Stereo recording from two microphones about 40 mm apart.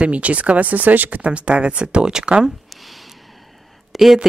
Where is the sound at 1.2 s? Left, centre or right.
Right.